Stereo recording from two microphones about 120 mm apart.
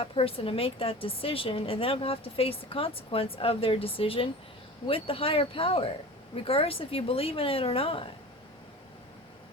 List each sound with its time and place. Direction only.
0.0 s a woman's voice: 50° left (ahead or behind)